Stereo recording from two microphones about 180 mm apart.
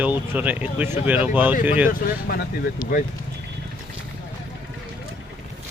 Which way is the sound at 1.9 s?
55° left (ahead or behind).